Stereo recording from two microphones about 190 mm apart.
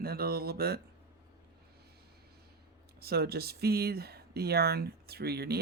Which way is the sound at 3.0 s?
55° right (ahead or behind).